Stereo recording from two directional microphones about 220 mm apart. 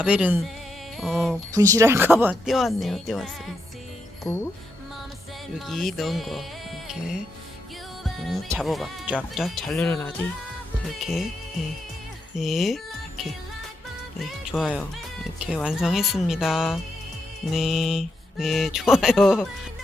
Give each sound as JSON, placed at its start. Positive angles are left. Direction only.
{"t": 0.0, "sound": "speech", "side_deg": -5}
{"t": 0.9, "sound": "a sound", "side_deg": 0}
{"t": 1.5, "sound": "speech", "side_deg": -15}
{"t": 5.5, "sound": "speech", "side_deg": 0}
{"t": 8.4, "sound": "speech", "side_deg": 0}
{"t": 11.0, "sound": "speech", "side_deg": 0}
{"t": 12.4, "sound": "speech", "side_deg": 0}